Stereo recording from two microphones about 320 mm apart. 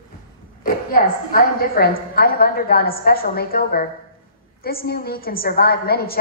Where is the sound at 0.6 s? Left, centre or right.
Left.